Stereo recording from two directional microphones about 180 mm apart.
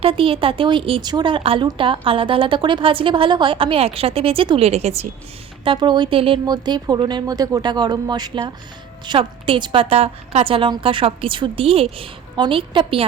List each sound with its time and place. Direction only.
0.0 s a woman's voice: 30° right (ahead or behind)